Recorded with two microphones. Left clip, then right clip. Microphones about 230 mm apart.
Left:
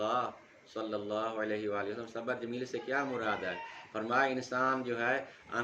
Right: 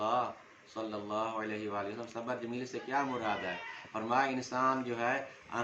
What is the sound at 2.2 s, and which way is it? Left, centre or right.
Speech, centre.